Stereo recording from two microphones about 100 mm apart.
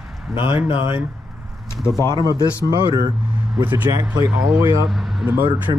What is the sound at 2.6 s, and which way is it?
Speech, 40° right (ahead or behind).